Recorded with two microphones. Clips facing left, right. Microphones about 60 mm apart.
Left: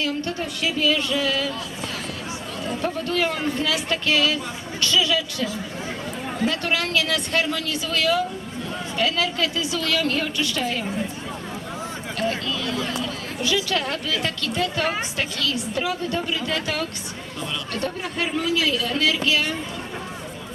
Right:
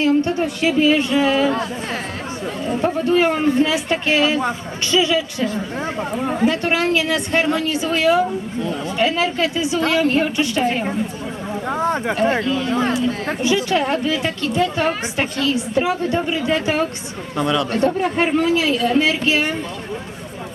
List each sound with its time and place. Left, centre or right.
0.0 s a woman's voice: right
2.6 s a woman's voice: right
5.5 s chatter: right
6.3 s a woman's voice: right
11.7 s a sound: right
12.2 s a woman's voice: right
17.3 s speech: right
17.7 s speech: right